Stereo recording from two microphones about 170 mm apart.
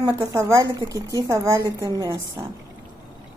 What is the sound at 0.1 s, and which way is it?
A woman's voice, 15° right (ahead or behind).